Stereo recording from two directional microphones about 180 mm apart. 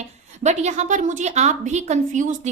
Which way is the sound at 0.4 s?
40° right (ahead or behind).